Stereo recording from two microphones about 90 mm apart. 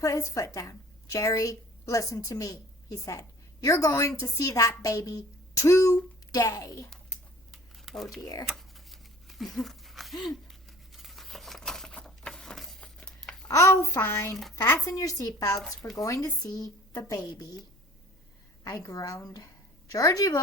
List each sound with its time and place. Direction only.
0.0 s a woman's voice: 35° left (ahead or behind)
6.3 s a woman's voice: 45° left (ahead or behind)
7.5 s a sound: 5° left (ahead or behind)
8.2 s a woman's voice: 45° left (ahead or behind)
8.4 s a sound: centre (ahead or behind)
13.5 s a woman's voice: 35° left (ahead or behind)
18.6 s a woman's voice: 40° left (ahead or behind)